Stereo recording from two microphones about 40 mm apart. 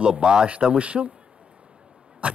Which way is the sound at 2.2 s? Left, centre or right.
Right.